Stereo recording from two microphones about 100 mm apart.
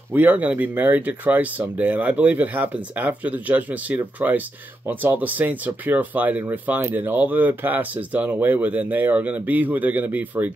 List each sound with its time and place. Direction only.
0.1 s speech: 15° right (ahead or behind)